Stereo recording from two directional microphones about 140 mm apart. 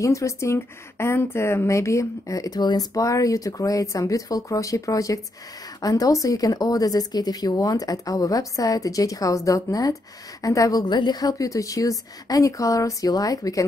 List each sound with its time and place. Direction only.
0.0 s a woman's voice: 20° left (ahead or behind)